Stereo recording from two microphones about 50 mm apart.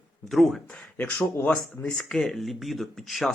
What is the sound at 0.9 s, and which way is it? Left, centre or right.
Speech, left.